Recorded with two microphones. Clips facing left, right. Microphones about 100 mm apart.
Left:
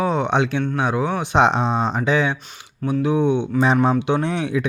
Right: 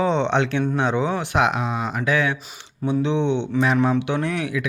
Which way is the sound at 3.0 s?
5° left (ahead or behind).